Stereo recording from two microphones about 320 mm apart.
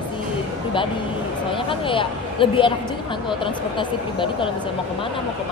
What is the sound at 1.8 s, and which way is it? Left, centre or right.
Speech, centre.